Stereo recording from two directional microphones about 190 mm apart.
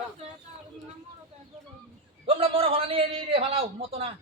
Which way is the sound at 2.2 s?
30° right (ahead or behind).